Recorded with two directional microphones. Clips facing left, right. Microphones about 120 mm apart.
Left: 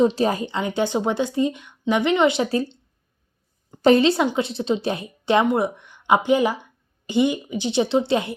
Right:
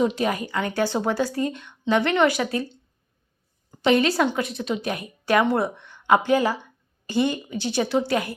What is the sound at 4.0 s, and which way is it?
A woman's voice, 25° left (ahead or behind).